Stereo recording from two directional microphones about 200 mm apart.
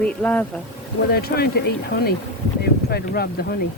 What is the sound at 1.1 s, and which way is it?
A woman's voice, 50° left (ahead or behind).